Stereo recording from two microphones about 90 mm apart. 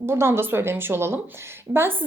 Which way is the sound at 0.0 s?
30° right (ahead or behind).